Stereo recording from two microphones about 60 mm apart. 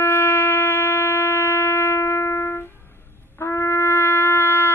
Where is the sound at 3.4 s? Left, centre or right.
Left.